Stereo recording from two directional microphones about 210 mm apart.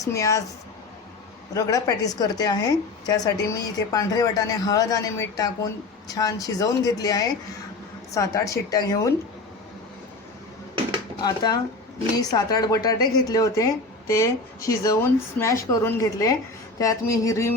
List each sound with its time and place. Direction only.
0.0 s a woman's voice: 15° left (ahead or behind)
1.5 s a woman's voice: 15° left (ahead or behind)
11.2 s a woman's voice: 20° left (ahead or behind)